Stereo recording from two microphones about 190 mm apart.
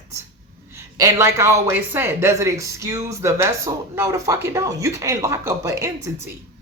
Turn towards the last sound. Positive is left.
turn(degrees=-15)  # may be behind; listen again after turning